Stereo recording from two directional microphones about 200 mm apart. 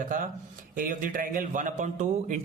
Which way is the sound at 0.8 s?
45° right (ahead or behind).